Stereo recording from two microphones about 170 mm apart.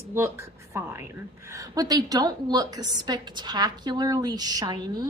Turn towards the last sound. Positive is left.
turn(degrees=-20)  # may be behind; listen again after turning